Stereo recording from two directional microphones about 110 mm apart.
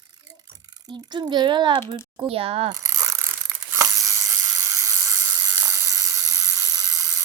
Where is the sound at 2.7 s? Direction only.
30° right (ahead or behind).